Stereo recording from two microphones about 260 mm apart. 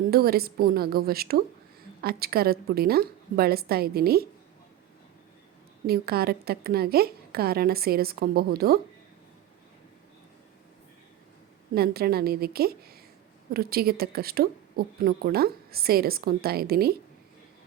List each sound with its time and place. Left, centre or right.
0.1 s a woman's voice: right
5.8 s a woman's voice: right
11.7 s a woman's voice: right